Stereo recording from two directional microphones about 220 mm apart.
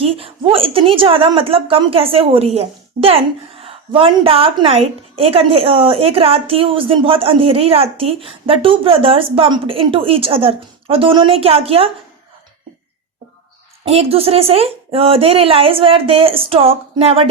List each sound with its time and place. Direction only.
0.0 s a woman's voice: 25° right (ahead or behind)
13.8 s a woman's voice: 25° right (ahead or behind)